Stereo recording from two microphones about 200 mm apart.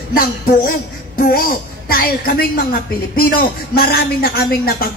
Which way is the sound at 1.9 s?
45° left (ahead or behind).